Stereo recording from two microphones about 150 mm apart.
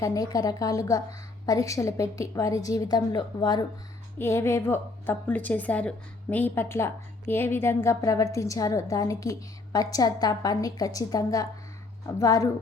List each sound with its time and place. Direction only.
0.0 s a woman's voice: 20° left (ahead or behind)
4.2 s a woman's voice: 15° left (ahead or behind)